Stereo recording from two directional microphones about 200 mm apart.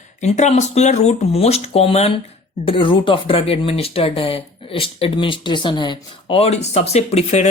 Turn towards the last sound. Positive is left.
turn(degrees=35)  # may be behind; listen again after turning